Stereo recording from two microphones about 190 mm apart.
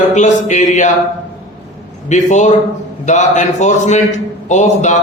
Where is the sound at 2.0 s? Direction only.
40° left (ahead or behind).